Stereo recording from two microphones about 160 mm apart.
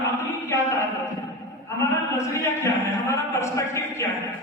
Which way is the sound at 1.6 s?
15° left (ahead or behind).